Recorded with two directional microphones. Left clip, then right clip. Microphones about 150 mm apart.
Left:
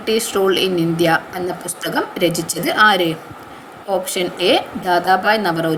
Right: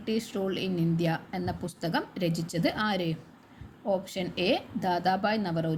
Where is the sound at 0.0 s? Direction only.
15° right (ahead or behind).